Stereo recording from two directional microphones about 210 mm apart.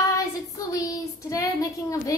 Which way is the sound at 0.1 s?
15° left (ahead or behind).